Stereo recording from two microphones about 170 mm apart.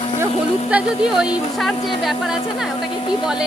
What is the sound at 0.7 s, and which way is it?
A man's voice, 10° right (ahead or behind).